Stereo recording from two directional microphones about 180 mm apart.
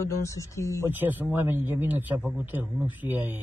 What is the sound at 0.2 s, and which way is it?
Speech, 15° left (ahead or behind).